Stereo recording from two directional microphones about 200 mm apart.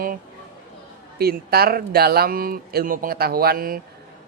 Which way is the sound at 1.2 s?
50° right (ahead or behind).